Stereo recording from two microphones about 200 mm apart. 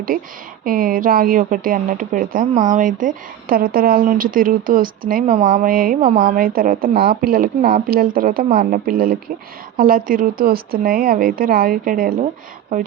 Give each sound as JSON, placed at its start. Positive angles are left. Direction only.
{"t": 0.6, "sound": "a woman's voice", "side_deg": -45}